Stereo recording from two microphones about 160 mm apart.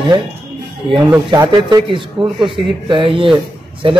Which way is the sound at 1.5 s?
30° right (ahead or behind).